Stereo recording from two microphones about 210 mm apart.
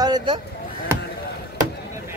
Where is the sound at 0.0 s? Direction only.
20° right (ahead or behind).